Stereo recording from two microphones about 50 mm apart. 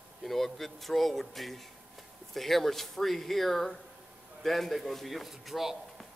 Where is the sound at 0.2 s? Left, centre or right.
Centre.